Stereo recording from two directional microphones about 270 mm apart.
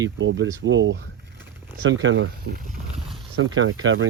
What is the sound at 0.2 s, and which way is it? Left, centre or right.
Speech, right.